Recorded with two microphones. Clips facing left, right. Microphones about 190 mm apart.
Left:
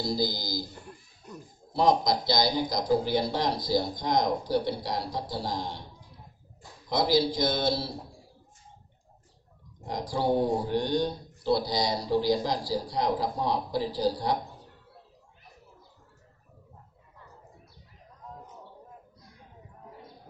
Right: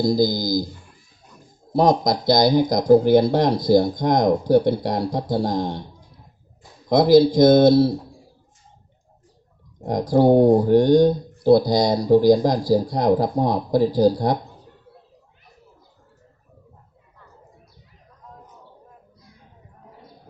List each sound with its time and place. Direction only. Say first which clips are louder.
0.0 s speech: right 11 dB; 45° right (ahead or behind)
1.7 s speech: right 6 dB; 45° right (ahead or behind)
6.8 s speech: right 11 dB; 50° right (ahead or behind)
9.8 s speech: right 12 dB; 50° right (ahead or behind)